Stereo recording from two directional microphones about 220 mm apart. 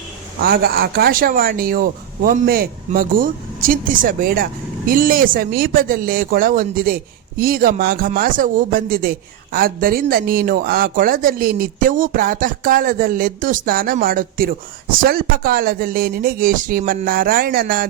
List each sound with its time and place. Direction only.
0.4 s speech: 45° right (ahead or behind)